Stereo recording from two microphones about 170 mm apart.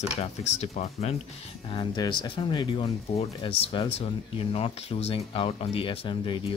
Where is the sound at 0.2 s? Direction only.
40° left (ahead or behind).